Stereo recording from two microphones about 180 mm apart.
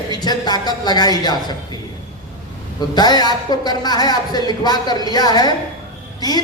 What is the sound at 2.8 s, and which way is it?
A man's voice, 25° left (ahead or behind).